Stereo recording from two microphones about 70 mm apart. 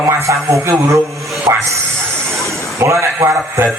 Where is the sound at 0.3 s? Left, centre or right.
Right.